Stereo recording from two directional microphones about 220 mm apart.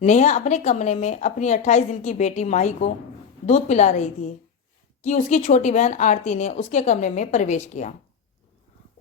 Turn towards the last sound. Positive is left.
turn(degrees=35)  # may be behind; listen again after turning